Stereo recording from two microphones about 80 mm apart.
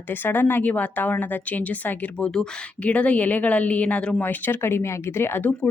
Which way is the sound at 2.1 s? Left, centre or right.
Centre.